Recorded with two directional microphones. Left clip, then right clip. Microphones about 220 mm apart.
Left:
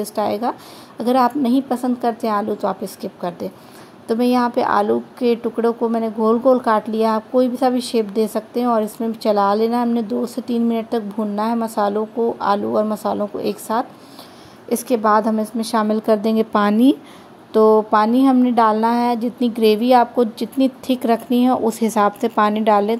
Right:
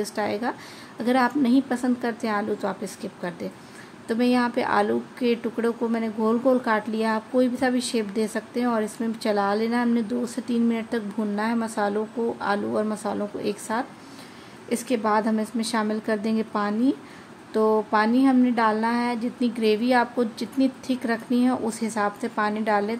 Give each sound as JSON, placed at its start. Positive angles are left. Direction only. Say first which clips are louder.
{"t": 0.0, "sound": "a woman's voice", "louder": "left 6 dB", "side_deg": 15}
{"t": 16.5, "sound": "speech", "louder": "left 9 dB", "side_deg": 35}
{"t": 17.5, "sound": "speech", "louder": "left 8 dB", "side_deg": 20}